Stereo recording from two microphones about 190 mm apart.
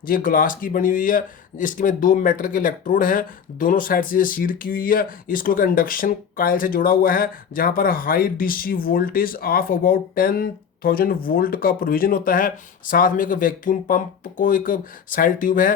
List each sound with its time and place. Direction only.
0.0 s speech: 45° left (ahead or behind)